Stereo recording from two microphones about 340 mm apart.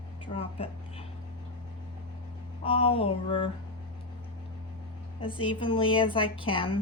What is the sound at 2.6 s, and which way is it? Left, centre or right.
Music, centre.